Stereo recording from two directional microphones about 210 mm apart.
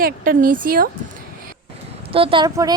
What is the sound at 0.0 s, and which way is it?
Speech, 40° right (ahead or behind).